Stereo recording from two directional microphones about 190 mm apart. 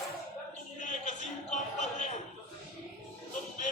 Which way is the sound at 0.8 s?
40° left (ahead or behind).